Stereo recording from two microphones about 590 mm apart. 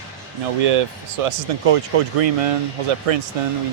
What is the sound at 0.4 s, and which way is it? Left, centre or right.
Speech, right.